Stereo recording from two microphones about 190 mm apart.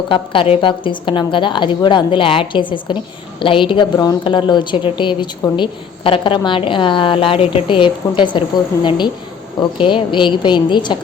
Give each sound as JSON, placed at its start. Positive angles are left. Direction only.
{"t": 0.1, "sound": "a woman's voice", "side_deg": 30}